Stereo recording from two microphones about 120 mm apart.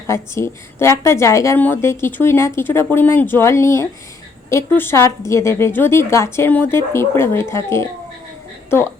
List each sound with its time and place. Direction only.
0.1 s a woman's voice: 25° left (ahead or behind)